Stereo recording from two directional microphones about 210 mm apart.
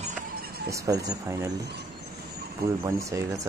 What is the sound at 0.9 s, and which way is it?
Speech, 15° right (ahead or behind).